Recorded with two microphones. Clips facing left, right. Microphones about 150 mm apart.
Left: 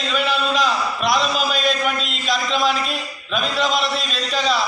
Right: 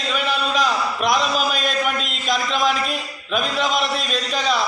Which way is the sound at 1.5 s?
50° right (ahead or behind).